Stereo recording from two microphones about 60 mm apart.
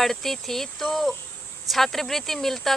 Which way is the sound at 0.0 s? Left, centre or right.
Centre.